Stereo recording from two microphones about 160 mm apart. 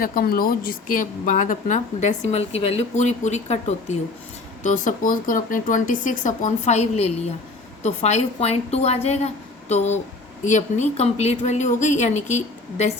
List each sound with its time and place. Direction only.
0.0 s speech: 65° left (ahead or behind); by 12.9 s 45° left (ahead or behind)